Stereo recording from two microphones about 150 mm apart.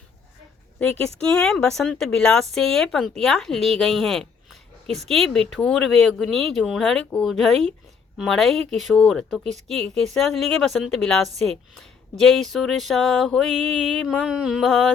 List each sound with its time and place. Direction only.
0.8 s speech: 5° left (ahead or behind)